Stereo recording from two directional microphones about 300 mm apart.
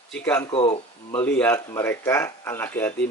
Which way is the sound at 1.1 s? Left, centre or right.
Centre.